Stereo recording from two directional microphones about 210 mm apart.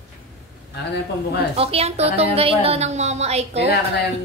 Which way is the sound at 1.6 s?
30° right (ahead or behind).